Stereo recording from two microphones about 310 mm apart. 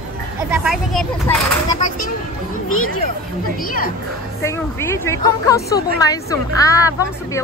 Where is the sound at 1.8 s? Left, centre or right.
Left.